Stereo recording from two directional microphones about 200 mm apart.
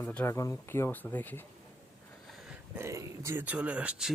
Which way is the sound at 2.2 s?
Centre (ahead or behind).